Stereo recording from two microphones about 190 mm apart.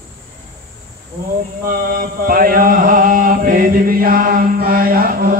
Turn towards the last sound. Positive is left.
turn(degrees=-50)  # may be behind; listen again after turning